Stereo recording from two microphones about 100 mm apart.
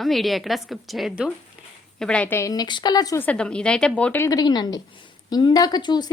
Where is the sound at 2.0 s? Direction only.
10° left (ahead or behind).